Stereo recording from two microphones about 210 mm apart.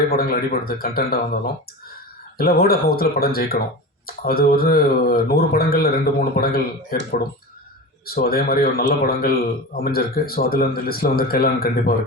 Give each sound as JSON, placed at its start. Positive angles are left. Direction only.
{"t": 0.1, "sound": "a man's voice", "side_deg": 45}
{"t": 2.4, "sound": "a man's voice", "side_deg": 45}
{"t": 8.0, "sound": "a man's voice", "side_deg": 45}